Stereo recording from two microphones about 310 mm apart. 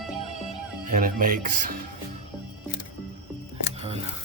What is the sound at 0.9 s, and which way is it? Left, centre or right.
Speech, right.